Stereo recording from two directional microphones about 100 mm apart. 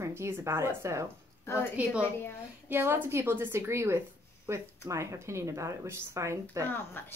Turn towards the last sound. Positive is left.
turn(degrees=20)  # may be behind; listen again after turning